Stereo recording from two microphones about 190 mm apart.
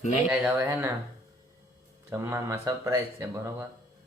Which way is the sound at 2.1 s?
15° right (ahead or behind).